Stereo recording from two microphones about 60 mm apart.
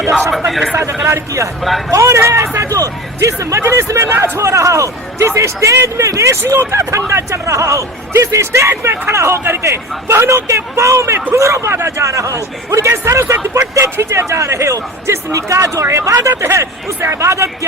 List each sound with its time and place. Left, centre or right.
0.3 s speech: centre
1.0 s speech: right
2.6 s speech: right